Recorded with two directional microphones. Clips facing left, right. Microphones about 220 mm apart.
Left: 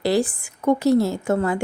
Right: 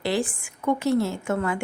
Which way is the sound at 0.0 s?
40° left (ahead or behind).